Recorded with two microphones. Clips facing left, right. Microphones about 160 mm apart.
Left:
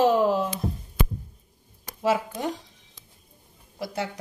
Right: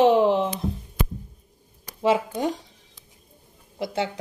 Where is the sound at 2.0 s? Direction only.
25° right (ahead or behind).